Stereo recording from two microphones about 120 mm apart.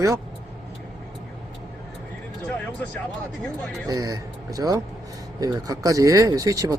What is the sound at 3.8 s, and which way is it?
A man's voice, 30° right (ahead or behind).